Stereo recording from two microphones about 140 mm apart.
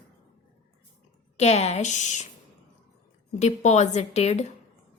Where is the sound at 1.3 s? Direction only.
50° left (ahead or behind).